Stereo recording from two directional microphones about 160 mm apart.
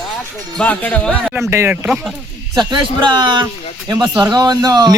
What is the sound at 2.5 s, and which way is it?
A man's voice, 25° right (ahead or behind).